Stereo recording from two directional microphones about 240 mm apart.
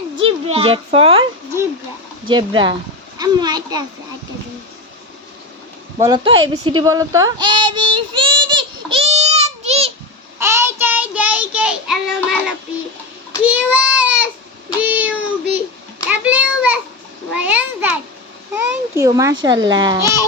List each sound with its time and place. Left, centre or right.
0.2 s a child's voice: right
2.2 s a woman's voice: centre
6.0 s a woman's voice: centre
7.9 s child singing: centre
10.3 s child singing: centre
16.0 s a sound: centre
18.5 s a child's voice: centre